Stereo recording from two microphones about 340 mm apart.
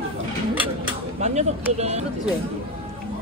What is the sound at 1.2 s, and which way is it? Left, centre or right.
Speech, centre.